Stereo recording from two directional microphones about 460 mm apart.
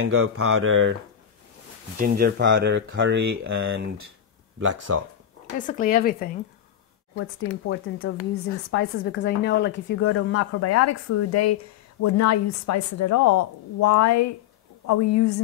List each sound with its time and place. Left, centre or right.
0.0 s speech: right
2.0 s speech: centre
4.6 s speech: right
5.6 s a woman's voice: centre; by 15.4 s left